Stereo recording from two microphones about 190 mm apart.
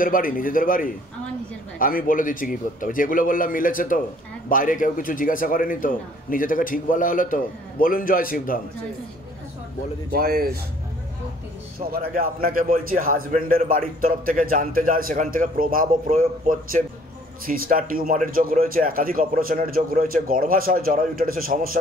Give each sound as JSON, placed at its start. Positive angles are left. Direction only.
{"t": 0.0, "sound": "a man's voice", "side_deg": 45}
{"t": 10.1, "sound": "a man's voice", "side_deg": -50}
{"t": 11.9, "sound": "a man's voice", "side_deg": -50}